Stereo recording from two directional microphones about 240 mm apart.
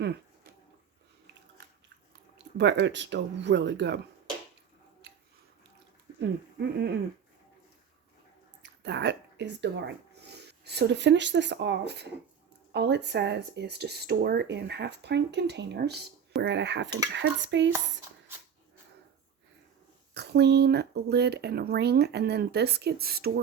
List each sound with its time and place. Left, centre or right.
2.6 s speech: right
5.0 s a sound: right
6.1 s speech: right
8.6 s speech: right
20.1 s speech: right